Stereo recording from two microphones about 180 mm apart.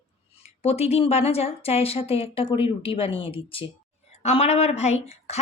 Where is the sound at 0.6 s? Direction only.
35° left (ahead or behind).